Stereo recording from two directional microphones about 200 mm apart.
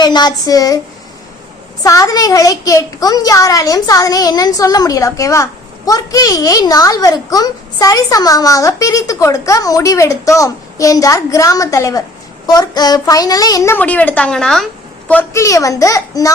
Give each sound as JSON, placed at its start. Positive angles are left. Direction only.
{"t": 0.0, "sound": "speech", "side_deg": 20}
{"t": 1.8, "sound": "a child's voice", "side_deg": 20}